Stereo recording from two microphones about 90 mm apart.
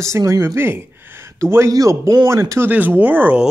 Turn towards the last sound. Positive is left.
turn(degrees=-20)  # may be behind; listen again after turning